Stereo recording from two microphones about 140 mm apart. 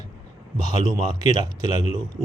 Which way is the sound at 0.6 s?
30° right (ahead or behind).